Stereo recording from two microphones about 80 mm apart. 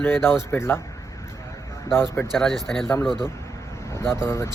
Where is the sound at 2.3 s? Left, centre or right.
Centre.